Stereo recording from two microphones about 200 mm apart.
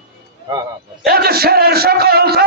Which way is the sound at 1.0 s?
50° right (ahead or behind).